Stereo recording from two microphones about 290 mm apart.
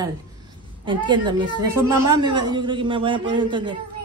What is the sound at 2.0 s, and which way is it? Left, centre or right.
Speech, right.